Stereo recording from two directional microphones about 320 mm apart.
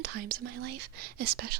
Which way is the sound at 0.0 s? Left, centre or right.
Right.